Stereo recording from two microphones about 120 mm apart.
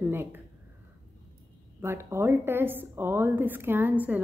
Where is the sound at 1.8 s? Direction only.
20° right (ahead or behind).